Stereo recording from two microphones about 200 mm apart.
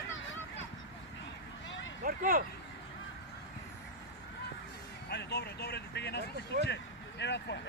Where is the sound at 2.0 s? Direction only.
45° right (ahead or behind).